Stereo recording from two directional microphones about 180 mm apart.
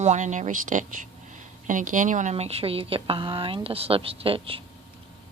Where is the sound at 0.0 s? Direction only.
40° right (ahead or behind).